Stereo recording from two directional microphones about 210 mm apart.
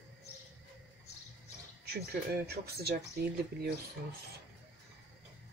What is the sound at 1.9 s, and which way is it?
A woman's voice, 50° right (ahead or behind).